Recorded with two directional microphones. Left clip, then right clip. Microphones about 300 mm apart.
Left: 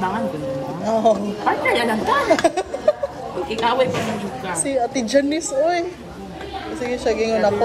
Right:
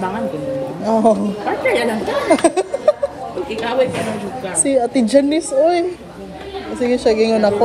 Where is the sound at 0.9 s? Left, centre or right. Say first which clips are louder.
Right 3 dB; right.